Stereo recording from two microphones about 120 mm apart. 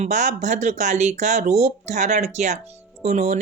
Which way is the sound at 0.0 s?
85° right.